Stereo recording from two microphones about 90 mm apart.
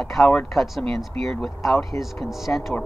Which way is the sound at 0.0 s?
5° left (ahead or behind).